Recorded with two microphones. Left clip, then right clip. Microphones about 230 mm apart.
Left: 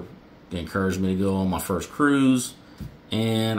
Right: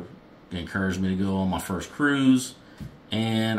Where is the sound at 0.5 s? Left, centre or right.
Centre.